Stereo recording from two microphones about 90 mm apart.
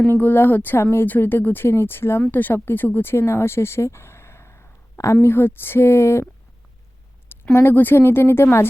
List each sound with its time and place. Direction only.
0.0 s speech: 20° left (ahead or behind)
7.5 s speech: 25° left (ahead or behind)